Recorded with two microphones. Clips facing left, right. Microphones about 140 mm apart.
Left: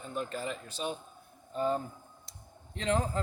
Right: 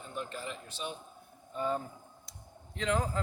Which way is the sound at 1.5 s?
30° left (ahead or behind).